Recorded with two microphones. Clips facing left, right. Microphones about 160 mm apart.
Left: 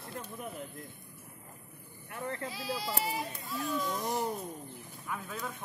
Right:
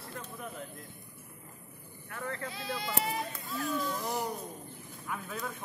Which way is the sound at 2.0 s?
20° left (ahead or behind).